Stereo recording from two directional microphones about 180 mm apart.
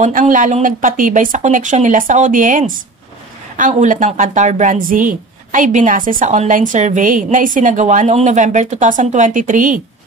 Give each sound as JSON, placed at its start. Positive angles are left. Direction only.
{"t": 0.0, "sound": "a woman's voice", "side_deg": -45}